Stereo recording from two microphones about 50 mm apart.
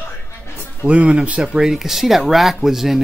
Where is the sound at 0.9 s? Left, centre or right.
Right.